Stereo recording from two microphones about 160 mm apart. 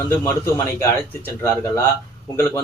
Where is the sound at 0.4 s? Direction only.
15° left (ahead or behind).